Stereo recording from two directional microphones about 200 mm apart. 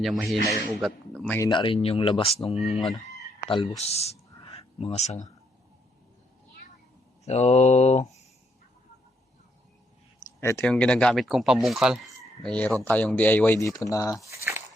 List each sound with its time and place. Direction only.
0.0 s speech: centre (ahead or behind)
1.5 s speech: 25° left (ahead or behind)
7.3 s mantra: 35° left (ahead or behind)
10.4 s speech: 10° left (ahead or behind)